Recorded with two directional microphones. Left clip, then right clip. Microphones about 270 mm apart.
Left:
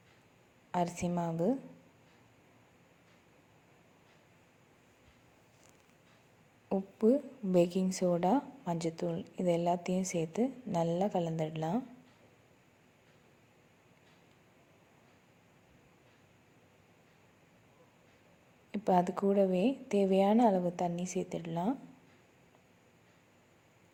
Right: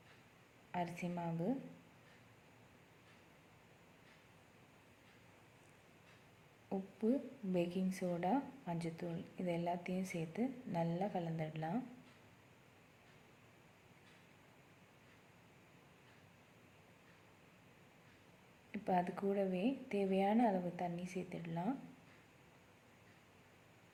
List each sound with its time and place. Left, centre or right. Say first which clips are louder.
0.7 s a woman's voice: left 9 dB; left
6.7 s a woman's voice: left 10 dB; left
18.7 s a woman's voice: left 8 dB; left